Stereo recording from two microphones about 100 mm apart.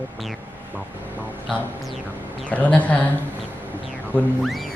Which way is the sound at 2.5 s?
15° left (ahead or behind).